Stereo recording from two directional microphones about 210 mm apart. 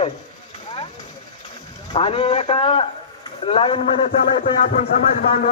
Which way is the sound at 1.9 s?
25° left (ahead or behind).